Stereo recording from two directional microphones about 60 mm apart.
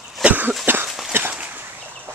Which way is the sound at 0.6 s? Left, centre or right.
Right.